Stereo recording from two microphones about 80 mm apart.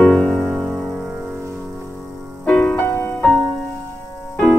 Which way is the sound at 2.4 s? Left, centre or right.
Centre.